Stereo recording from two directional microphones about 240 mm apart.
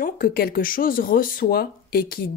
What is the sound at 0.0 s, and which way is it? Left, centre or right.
Speech, left.